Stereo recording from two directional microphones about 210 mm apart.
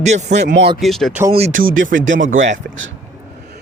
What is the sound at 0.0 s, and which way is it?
Speech, 35° right (ahead or behind).